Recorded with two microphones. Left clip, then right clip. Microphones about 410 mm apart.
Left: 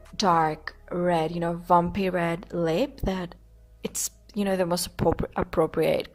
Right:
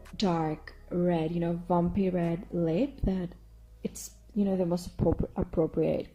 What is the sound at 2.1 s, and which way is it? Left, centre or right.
Speech, left.